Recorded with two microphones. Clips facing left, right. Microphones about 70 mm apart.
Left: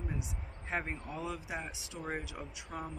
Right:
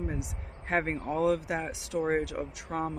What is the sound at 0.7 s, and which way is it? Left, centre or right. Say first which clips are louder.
Speech: right 9 dB; right.